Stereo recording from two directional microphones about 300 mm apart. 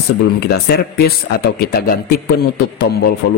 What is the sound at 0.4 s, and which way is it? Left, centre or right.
Speech, left.